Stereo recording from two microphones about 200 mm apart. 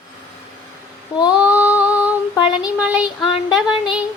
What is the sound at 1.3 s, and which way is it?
Female singing, 5° right (ahead or behind).